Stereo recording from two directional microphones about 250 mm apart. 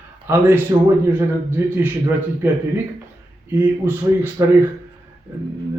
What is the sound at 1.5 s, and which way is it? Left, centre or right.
A man's voice, centre.